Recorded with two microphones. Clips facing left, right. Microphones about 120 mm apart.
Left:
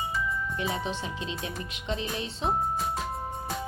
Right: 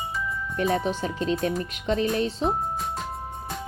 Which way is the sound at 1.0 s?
45° right (ahead or behind).